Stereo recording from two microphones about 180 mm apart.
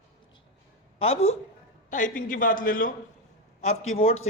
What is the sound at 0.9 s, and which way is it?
Speech, 35° left (ahead or behind).